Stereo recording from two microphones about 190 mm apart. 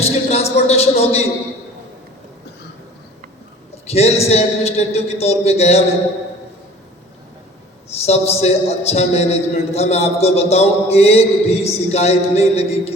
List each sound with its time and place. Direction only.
0.3 s a man's voice: 35° left (ahead or behind)
3.8 s a man's voice: 35° left (ahead or behind)
7.9 s a man's voice: 35° left (ahead or behind)